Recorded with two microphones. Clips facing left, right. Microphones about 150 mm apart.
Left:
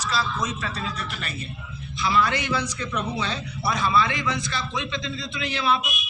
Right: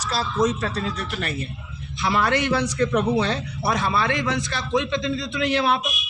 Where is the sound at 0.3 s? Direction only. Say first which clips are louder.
Right 7 dB; 50° right (ahead or behind).